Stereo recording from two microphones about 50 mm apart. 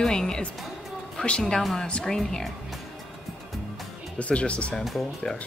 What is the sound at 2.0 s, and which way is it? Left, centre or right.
Speech, centre.